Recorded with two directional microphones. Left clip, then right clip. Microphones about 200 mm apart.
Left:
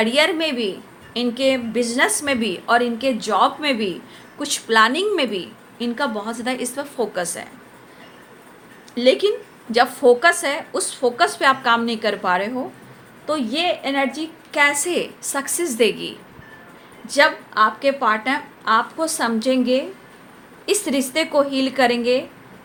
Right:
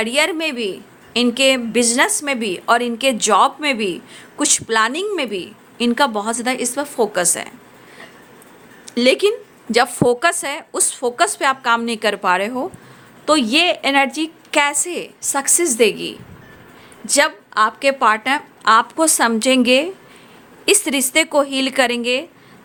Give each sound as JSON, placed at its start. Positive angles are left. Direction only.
{"t": 0.0, "sound": "a woman's voice", "side_deg": -35}
{"t": 9.0, "sound": "a woman's voice", "side_deg": -35}